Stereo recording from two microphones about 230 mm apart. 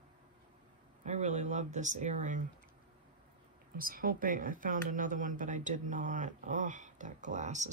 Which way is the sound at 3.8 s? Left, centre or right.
Right.